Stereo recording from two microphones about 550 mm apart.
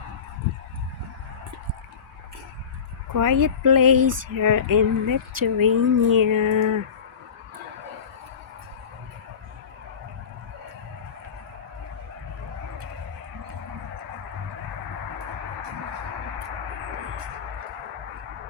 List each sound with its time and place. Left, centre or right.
3.2 s speech: right